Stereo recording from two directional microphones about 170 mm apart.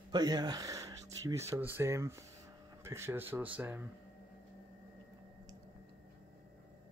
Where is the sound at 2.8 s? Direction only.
15° right (ahead or behind).